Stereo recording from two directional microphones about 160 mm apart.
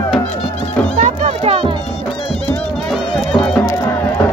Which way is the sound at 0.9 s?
45° right (ahead or behind).